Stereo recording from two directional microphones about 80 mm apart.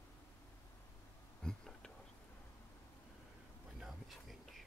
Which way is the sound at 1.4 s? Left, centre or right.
Centre.